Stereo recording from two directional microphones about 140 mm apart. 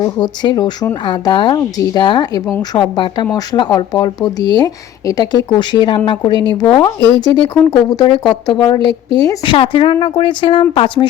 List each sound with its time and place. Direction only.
0.0 s a woman's voice: 30° left (ahead or behind)
9.4 s speech: 40° left (ahead or behind)